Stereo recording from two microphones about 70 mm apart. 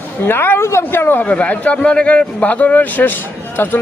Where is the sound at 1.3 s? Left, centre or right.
Centre.